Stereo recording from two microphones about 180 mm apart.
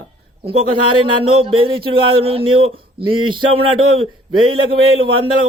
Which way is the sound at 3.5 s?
90° right.